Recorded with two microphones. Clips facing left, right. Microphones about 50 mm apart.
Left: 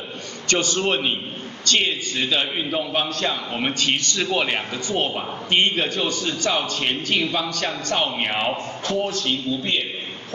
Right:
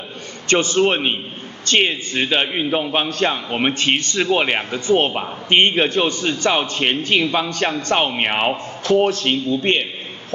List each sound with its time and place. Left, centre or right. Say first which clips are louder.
0.5 s a man's voice: right 5 dB; right
4.9 s a man's voice: right 6 dB; right
9.0 s speech: right 6 dB; right